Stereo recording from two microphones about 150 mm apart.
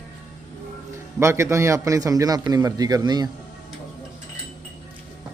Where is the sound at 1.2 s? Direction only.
20° right (ahead or behind).